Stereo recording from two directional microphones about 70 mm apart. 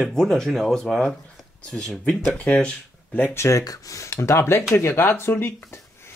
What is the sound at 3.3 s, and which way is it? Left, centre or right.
Speech, left.